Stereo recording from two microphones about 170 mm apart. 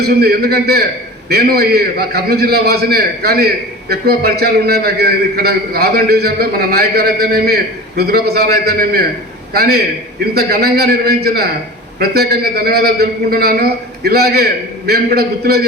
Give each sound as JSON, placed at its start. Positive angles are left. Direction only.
{"t": 0.0, "sound": "a man's voice", "side_deg": -70}